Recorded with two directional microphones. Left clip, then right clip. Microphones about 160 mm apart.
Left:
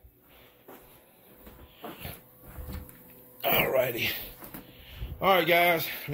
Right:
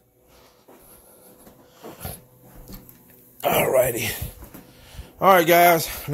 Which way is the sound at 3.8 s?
55° right (ahead or behind).